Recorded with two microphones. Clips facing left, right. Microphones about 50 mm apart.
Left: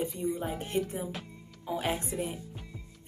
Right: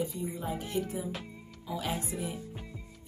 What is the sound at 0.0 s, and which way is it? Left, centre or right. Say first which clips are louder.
Speech: left 3 dB; left.